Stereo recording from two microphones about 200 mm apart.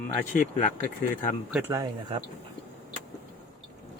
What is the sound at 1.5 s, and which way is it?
Speech, 10° right (ahead or behind).